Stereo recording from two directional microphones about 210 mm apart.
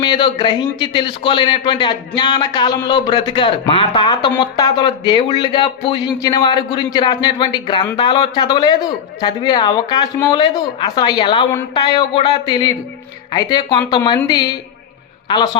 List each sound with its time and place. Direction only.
0.0 s a man's voice: 20° left (ahead or behind)